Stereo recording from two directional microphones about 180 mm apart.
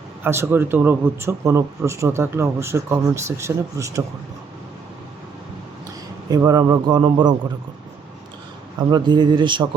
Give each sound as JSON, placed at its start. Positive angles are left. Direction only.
{"t": 0.2, "sound": "a man's voice", "side_deg": -15}
{"t": 6.3, "sound": "a man's voice", "side_deg": -20}
{"t": 8.9, "sound": "a man's voice", "side_deg": -25}